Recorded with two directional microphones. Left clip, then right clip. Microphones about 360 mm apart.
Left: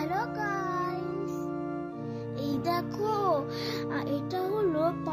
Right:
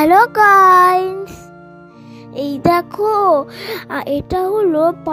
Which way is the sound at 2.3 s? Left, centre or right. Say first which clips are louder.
Right 16 dB; right.